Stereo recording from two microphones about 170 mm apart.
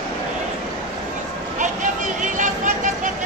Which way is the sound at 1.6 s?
50° right (ahead or behind).